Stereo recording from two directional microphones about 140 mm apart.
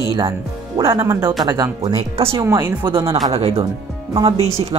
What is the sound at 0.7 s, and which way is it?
Speech, 25° right (ahead or behind).